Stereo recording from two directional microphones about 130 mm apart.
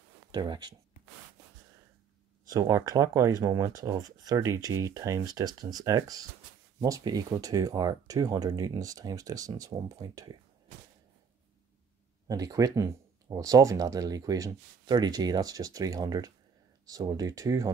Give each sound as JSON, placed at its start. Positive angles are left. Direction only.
{"t": 0.3, "sound": "speech", "side_deg": -35}
{"t": 2.4, "sound": "speech", "side_deg": -25}
{"t": 12.3, "sound": "speech", "side_deg": -30}